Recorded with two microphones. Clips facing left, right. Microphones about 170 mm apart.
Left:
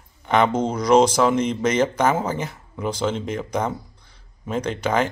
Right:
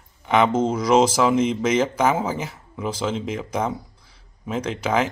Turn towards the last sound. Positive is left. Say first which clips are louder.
# left 1 dB
turn(degrees=-5)  # may be behind; listen again after turning